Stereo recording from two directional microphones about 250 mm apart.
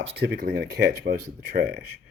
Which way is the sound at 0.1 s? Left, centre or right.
Right.